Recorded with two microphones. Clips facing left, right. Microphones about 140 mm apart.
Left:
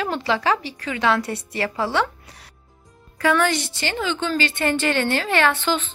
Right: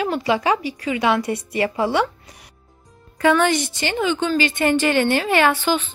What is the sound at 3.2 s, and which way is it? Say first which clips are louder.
A woman's voice: right 3 dB; 25° right (ahead or behind).